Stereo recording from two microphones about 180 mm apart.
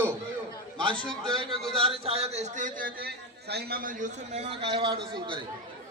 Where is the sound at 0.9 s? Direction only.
25° right (ahead or behind).